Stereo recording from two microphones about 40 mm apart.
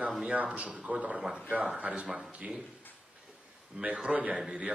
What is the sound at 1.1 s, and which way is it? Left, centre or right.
Speech, right.